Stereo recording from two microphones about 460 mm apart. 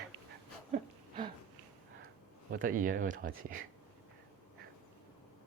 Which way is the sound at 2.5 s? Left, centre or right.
Centre.